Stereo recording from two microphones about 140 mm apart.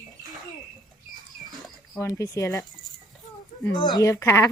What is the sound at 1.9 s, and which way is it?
Speech, 20° left (ahead or behind).